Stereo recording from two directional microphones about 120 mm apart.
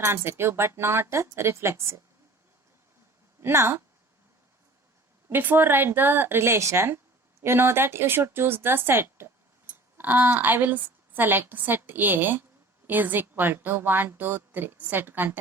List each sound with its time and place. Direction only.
0.0 s a woman's voice: 20° right (ahead or behind)
3.4 s a woman's voice: 20° right (ahead or behind)
5.3 s a woman's voice: 15° right (ahead or behind)